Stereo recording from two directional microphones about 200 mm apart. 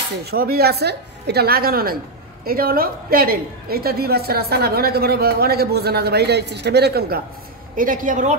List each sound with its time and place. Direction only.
0.2 s a woman's voice: 50° right (ahead or behind)